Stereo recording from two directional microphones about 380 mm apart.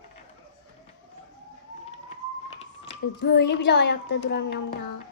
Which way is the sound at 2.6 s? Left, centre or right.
Left.